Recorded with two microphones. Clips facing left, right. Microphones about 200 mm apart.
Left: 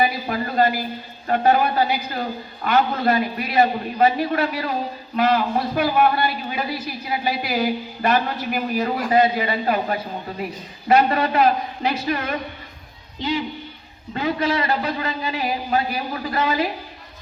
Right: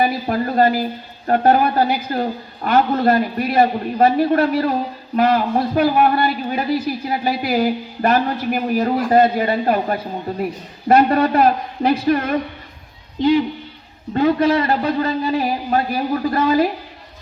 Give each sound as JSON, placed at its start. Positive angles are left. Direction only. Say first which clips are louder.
{"t": 0.0, "sound": "a man's voice", "louder": "right 4 dB", "side_deg": -45}
{"t": 14.1, "sound": "a man's voice", "louder": "right 7 dB", "side_deg": -40}